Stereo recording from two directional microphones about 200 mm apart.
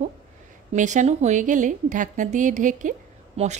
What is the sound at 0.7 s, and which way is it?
A woman's voice, 35° right (ahead or behind).